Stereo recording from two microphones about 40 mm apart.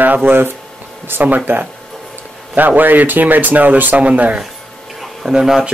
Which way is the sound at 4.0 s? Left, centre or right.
Right.